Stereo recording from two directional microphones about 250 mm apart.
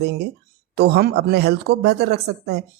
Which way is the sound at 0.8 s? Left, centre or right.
Right.